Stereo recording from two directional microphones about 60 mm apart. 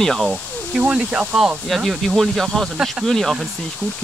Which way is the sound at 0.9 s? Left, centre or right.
Centre.